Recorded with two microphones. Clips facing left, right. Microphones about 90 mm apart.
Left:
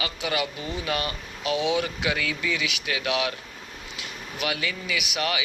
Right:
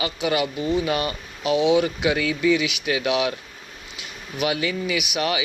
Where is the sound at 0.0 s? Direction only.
25° right (ahead or behind).